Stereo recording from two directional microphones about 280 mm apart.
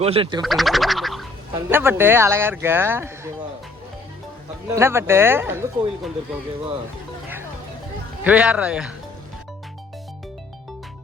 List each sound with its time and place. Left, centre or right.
0.0 s speech: centre
0.4 s a sound: centre
1.5 s speech: centre
4.7 s speech: centre
8.2 s a man's voice: centre